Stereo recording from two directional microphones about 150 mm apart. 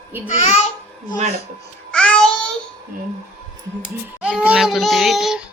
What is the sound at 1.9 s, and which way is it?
Music, 5° left (ahead or behind).